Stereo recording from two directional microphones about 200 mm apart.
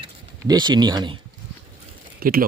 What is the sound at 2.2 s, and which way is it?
Speech, 45° right (ahead or behind).